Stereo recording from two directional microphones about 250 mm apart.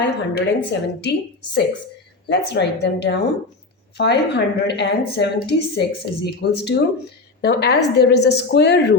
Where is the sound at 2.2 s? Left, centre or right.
Left.